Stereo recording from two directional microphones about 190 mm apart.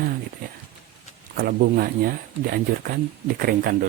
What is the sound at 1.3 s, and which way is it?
Speech, 50° right (ahead or behind).